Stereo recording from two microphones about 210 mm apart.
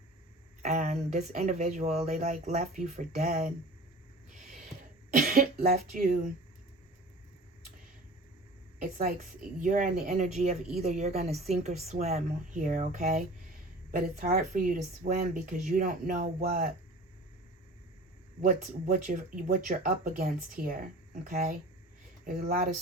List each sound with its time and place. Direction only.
0.6 s speech: 35° right (ahead or behind)
5.1 s speech: 45° right (ahead or behind)
9.6 s speech: 40° right (ahead or behind)
18.4 s speech: 35° right (ahead or behind)